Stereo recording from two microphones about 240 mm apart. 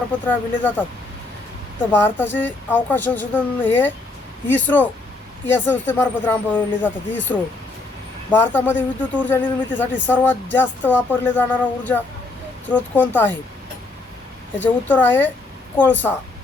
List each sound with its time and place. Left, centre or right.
0.3 s speech: centre
1.9 s speech: centre
14.5 s speech: centre